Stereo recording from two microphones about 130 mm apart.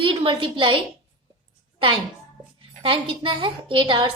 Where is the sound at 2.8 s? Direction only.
40° right (ahead or behind).